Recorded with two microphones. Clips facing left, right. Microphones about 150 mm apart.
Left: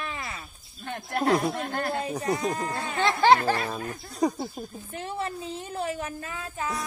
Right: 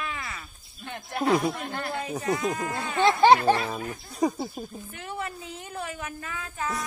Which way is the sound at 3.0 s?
20° right (ahead or behind).